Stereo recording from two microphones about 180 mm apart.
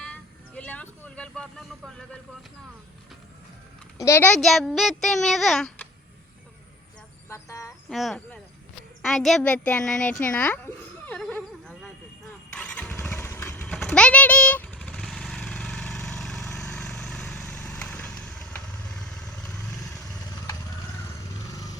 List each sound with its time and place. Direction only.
0.0 s vehicle: 5° left (ahead or behind)
3.9 s a child's voice: 15° left (ahead or behind)
4.4 s speech: centre (ahead or behind)
7.3 s speech: 15° left (ahead or behind)
7.9 s speech: centre (ahead or behind)
11.0 s wild animals: 10° left (ahead or behind)
12.5 s vehicle: 10° left (ahead or behind)
21.4 s vehicle: 20° left (ahead or behind)